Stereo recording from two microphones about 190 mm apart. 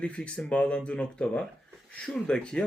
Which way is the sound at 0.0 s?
5° left (ahead or behind).